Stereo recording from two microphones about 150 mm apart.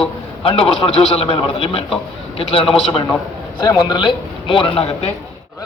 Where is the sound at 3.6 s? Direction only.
25° left (ahead or behind).